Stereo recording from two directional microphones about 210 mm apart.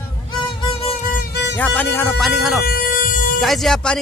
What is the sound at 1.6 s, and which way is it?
Speech, 10° left (ahead or behind).